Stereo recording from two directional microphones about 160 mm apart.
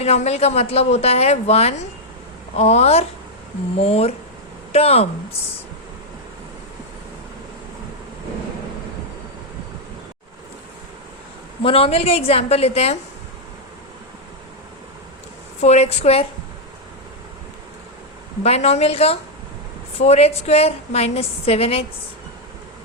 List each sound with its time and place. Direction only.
0.0 s a woman's voice: 40° left (ahead or behind)
11.6 s a woman's voice: 35° left (ahead or behind)
15.6 s a woman's voice: 40° left (ahead or behind)
18.4 s a woman's voice: 40° left (ahead or behind)